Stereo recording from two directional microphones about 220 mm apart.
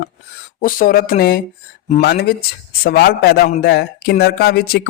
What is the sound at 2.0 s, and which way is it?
Speech, 45° left (ahead or behind).